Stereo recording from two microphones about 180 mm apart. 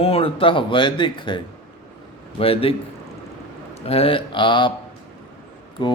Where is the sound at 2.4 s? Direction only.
30° left (ahead or behind).